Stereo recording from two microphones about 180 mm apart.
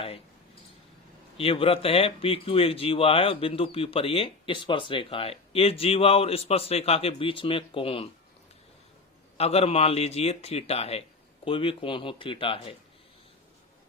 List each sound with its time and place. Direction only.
1.4 s speech: 30° left (ahead or behind)
9.4 s speech: 35° left (ahead or behind)